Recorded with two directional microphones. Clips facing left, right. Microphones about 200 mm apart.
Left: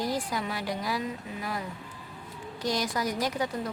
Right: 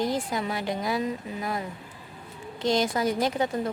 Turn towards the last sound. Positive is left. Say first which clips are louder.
# right 4 dB
turn(degrees=-25)  # may be behind; listen again after turning